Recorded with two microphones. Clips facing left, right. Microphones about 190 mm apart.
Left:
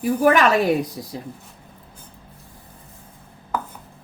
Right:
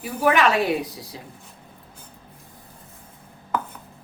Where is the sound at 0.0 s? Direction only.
45° left (ahead or behind).